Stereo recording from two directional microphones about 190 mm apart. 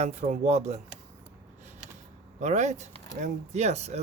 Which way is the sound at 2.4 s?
40° right (ahead or behind).